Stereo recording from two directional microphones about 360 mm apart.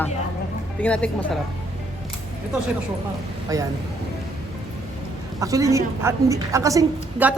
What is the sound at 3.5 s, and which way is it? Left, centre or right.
Speech, centre.